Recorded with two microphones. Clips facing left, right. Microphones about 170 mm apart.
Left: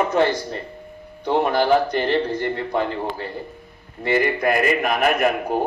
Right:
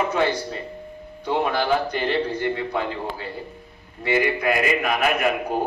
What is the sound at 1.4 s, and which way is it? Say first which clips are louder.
A man's voice: left 4 dB; 45° left (ahead or behind).